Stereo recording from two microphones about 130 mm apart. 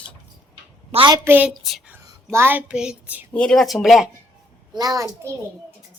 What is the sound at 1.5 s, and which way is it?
Speech, centre (ahead or behind).